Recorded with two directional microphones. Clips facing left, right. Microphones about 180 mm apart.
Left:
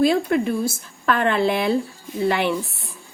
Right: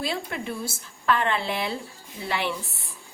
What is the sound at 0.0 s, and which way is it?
A woman's voice, 55° left (ahead or behind).